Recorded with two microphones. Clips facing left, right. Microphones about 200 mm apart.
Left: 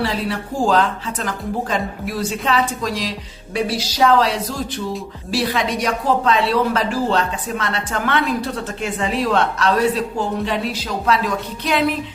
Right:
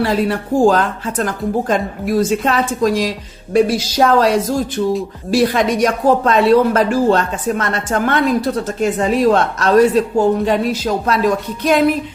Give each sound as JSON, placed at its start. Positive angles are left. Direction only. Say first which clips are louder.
{"t": 0.0, "sound": "speech", "louder": "right 6 dB", "side_deg": -50}